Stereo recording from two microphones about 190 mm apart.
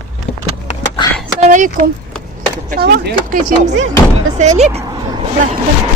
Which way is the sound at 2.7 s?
55° right (ahead or behind).